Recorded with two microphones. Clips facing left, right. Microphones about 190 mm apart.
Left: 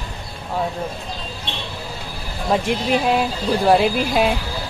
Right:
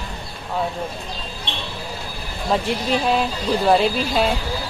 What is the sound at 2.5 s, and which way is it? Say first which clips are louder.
Speech: left 2 dB; 10° left (ahead or behind).